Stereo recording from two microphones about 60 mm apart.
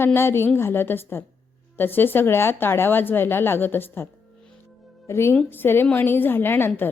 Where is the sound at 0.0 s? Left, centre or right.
Left.